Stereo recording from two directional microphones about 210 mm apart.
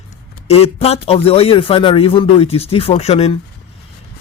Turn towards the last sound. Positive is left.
turn(degrees=30)  # may be behind; listen again after turning